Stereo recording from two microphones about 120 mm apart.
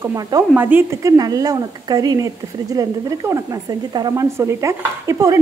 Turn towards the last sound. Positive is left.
turn(degrees=-25)  # may be behind; listen again after turning